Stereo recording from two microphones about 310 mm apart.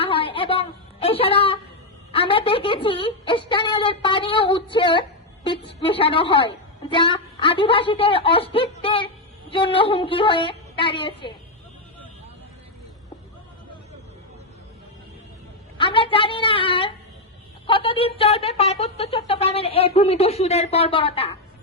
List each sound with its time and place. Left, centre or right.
0.0 s a sound: centre
2.1 s a woman's voice: centre
15.8 s a woman's voice: centre